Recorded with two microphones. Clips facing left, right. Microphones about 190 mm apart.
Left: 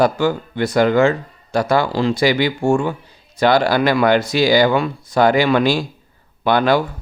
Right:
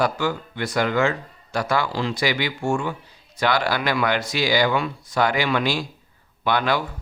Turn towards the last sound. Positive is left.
turn(degrees=35)  # may be behind; listen again after turning